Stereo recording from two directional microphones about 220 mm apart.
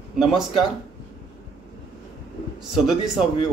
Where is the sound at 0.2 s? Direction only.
Centre (ahead or behind).